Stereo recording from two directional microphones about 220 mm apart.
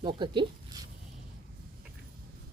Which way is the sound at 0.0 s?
20° right (ahead or behind).